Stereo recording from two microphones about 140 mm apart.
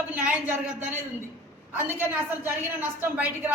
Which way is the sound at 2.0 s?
15° right (ahead or behind).